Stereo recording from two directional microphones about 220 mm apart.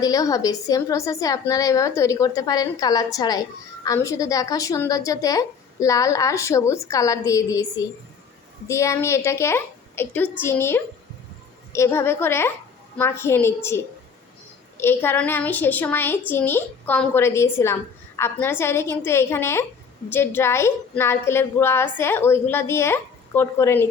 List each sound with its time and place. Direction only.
0.0 s a woman's voice: 15° left (ahead or behind)